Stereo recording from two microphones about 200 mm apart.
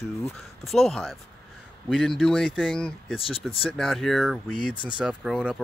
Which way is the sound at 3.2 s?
30° left (ahead or behind).